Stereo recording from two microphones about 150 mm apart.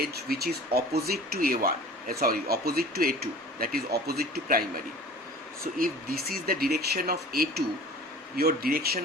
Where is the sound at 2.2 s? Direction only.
90° right.